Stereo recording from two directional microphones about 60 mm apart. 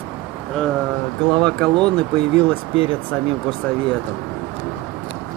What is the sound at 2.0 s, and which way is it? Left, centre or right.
Speech, left.